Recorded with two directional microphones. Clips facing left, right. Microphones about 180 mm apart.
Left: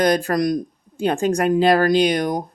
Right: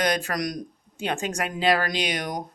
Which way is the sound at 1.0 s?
35° left (ahead or behind).